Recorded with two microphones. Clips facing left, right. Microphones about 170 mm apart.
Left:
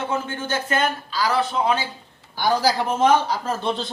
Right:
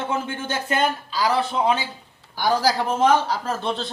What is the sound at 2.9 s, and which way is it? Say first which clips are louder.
Speech: left 1 dB; 5° right (ahead or behind).